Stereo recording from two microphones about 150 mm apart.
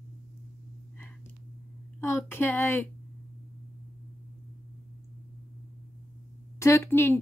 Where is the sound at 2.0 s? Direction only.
15° left (ahead or behind).